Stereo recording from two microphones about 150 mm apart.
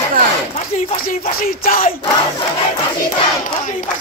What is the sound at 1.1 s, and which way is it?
Speech, 70° left (ahead or behind).